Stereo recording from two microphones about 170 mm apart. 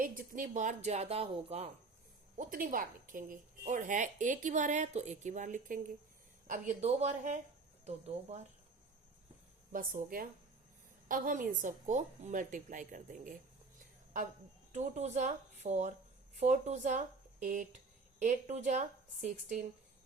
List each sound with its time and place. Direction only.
0.0 s speech: 55° right (ahead or behind); by 1.7 s 40° right (ahead or behind)
2.4 s a woman's voice: 55° right (ahead or behind)
9.7 s a woman's voice: 55° right (ahead or behind)